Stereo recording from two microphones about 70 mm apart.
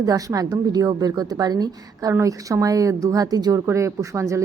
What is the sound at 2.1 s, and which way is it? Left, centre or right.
A woman's voice, right.